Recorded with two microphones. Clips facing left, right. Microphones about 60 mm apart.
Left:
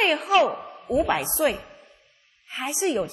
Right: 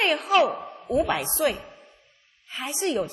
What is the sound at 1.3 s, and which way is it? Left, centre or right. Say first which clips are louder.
Speech: even; left.